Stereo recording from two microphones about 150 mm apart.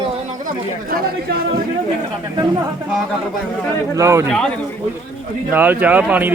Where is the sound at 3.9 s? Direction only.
20° right (ahead or behind).